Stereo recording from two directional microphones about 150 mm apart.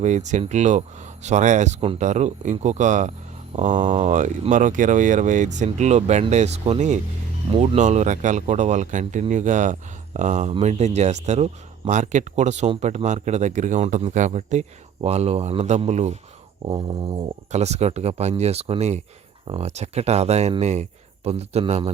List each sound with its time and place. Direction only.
0.0 s speech: 50° right (ahead or behind)
7.5 s speech: 35° right (ahead or behind)
7.8 s speech: 50° right (ahead or behind)